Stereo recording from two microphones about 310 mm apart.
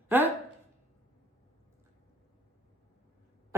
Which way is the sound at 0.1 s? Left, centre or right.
Centre.